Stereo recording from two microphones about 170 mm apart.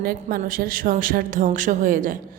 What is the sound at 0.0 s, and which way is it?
A woman's voice, 60° right (ahead or behind).